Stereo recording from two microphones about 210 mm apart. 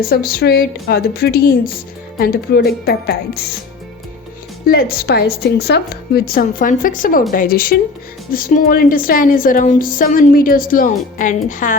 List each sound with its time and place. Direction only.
0.0 s a woman's voice: 45° left (ahead or behind)
4.7 s a woman's voice: 45° left (ahead or behind)